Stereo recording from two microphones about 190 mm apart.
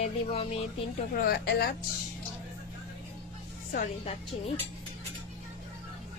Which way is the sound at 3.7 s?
45° left (ahead or behind).